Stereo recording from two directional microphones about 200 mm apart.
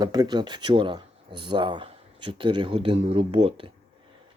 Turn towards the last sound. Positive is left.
turn(degrees=-25)  # may be behind; listen again after turning